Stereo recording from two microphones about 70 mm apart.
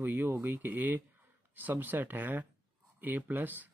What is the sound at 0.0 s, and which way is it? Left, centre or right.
Speech, right.